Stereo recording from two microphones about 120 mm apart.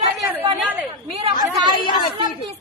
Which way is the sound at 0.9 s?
50° right (ahead or behind).